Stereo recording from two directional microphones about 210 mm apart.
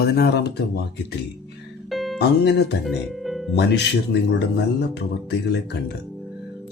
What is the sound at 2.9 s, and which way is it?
Speech, centre (ahead or behind).